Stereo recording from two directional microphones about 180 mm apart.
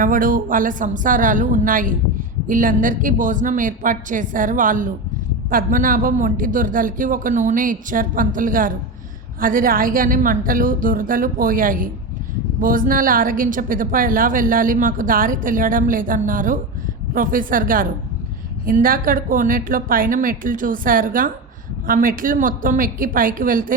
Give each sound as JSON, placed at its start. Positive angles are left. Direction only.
{"t": 0.0, "sound": "a woman's voice", "side_deg": -50}